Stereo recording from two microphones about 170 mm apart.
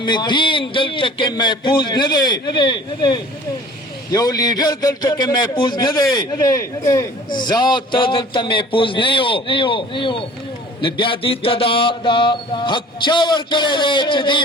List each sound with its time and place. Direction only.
0.0 s a man's voice: 25° left (ahead or behind)